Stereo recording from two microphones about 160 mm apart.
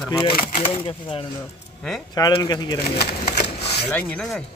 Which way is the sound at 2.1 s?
25° left (ahead or behind).